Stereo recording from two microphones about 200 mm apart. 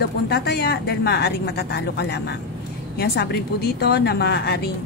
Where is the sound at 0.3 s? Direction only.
55° left (ahead or behind).